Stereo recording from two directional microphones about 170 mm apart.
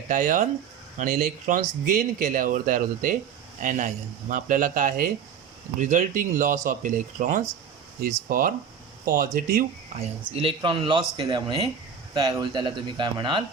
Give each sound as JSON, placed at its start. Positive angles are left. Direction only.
{"t": 0.1, "sound": "speech", "side_deg": -55}
{"t": 10.3, "sound": "speech", "side_deg": -30}